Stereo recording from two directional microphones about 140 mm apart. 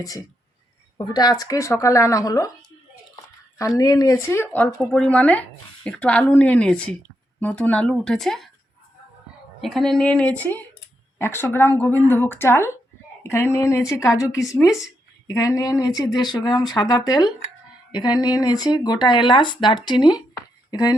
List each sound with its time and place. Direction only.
0.0 s speech: 25° left (ahead or behind)
3.8 s speech: 25° left (ahead or behind); by 8.4 s centre (ahead or behind)
9.6 s speech: centre (ahead or behind); by 20.9 s 25° left (ahead or behind)